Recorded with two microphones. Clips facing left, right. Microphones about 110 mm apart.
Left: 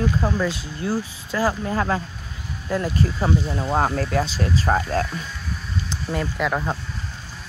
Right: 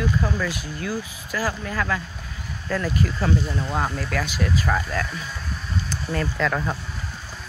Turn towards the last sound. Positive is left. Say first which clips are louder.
# left 1 dB
turn(degrees=15)  # may be behind; listen again after turning